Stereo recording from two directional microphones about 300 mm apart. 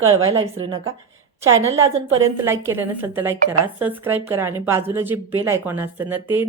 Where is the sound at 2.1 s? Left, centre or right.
Centre.